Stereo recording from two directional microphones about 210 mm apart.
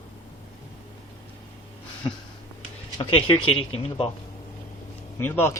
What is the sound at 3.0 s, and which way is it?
Speech, 25° left (ahead or behind).